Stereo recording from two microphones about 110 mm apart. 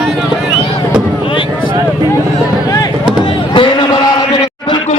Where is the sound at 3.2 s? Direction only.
50° left (ahead or behind).